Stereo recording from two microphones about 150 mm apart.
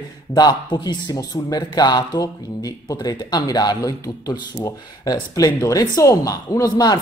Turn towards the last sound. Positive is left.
turn(degrees=25)  # may be behind; listen again after turning